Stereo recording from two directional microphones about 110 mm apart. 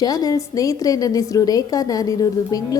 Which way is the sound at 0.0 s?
35° left (ahead or behind).